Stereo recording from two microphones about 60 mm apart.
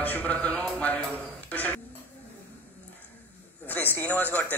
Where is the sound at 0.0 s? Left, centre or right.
Left.